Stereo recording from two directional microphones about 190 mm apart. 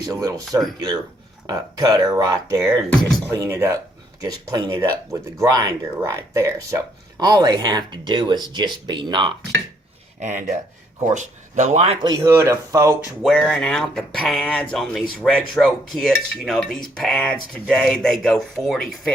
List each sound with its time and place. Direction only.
0.0 s speech: 20° right (ahead or behind)
10.2 s speech: 40° right (ahead or behind)
12.0 s speech: 20° right (ahead or behind)
13.2 s speech: centre (ahead or behind)